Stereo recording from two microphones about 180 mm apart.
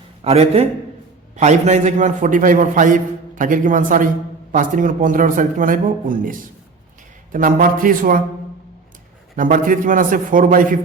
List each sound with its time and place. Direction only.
0.3 s a man's voice: 35° right (ahead or behind)
9.3 s a man's voice: 50° right (ahead or behind)